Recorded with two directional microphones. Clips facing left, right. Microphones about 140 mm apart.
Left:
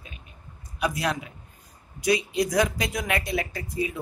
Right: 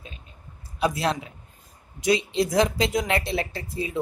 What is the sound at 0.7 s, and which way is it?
A woman's voice, 30° right (ahead or behind).